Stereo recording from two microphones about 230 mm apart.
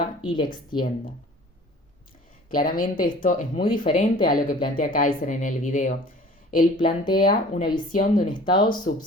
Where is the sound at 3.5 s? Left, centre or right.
Centre.